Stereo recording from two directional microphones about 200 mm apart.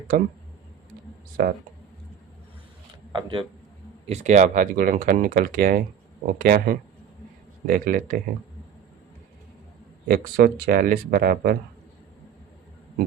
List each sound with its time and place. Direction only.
0.1 s speech: 45° right (ahead or behind)
1.4 s speech: 50° right (ahead or behind)
3.1 s a man's voice: 25° right (ahead or behind)
4.0 s speech: 35° right (ahead or behind)
10.1 s speech: 45° right (ahead or behind)